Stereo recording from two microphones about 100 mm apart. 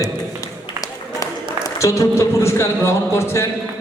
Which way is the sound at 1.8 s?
30° left (ahead or behind).